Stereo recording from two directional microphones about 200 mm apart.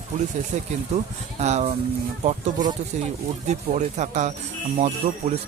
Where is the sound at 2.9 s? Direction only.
35° right (ahead or behind).